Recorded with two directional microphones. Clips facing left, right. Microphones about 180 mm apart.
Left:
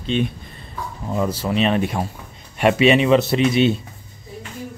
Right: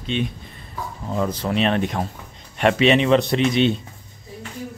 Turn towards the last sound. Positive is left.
turn(degrees=5)  # may be behind; listen again after turning